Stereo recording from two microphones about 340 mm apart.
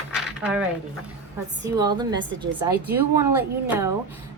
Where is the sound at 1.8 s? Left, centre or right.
Centre.